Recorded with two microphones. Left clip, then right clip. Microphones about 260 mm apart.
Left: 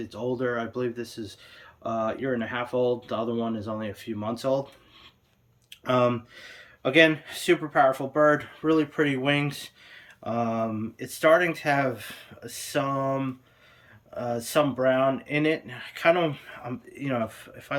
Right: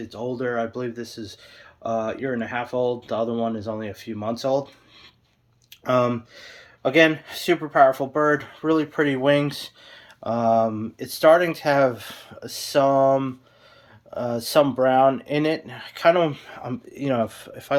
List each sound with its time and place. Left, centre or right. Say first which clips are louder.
0.0 s speech: right 1 dB; centre
5.8 s speech: right 2 dB; centre